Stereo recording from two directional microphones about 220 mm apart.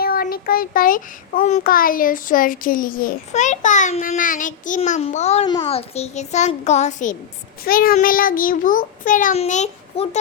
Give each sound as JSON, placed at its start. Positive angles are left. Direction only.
{"t": 0.0, "sound": "a child's voice", "side_deg": 40}